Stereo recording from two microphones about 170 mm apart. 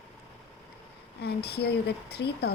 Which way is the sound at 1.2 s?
75° left (ahead or behind).